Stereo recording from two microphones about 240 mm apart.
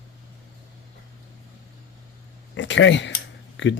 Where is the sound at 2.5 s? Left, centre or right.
Left.